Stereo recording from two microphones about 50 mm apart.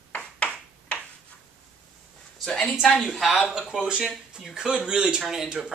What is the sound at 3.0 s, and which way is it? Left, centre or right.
Speech, centre.